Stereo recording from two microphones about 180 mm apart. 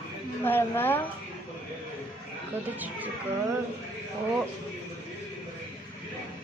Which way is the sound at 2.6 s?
10° right (ahead or behind).